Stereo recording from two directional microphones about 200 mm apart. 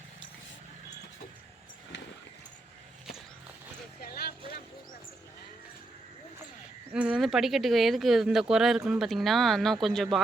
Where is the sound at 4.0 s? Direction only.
50° left (ahead or behind).